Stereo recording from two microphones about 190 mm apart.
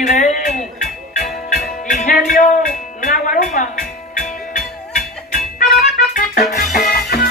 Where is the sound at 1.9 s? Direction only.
40° left (ahead or behind).